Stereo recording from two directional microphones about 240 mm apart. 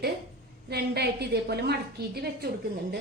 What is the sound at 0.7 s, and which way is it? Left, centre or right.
A woman's voice, right.